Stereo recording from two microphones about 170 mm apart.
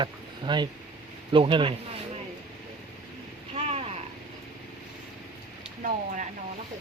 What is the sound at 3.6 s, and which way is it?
Vehicle, 35° right (ahead or behind).